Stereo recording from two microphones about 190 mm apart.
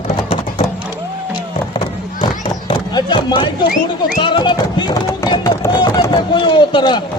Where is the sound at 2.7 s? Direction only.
25° left (ahead or behind).